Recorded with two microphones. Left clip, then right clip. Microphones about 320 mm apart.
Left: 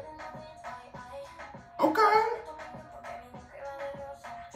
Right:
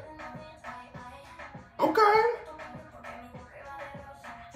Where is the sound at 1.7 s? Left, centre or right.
Centre.